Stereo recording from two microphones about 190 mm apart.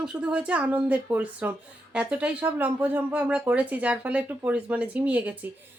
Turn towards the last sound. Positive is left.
turn(degrees=-10)  # may be behind; listen again after turning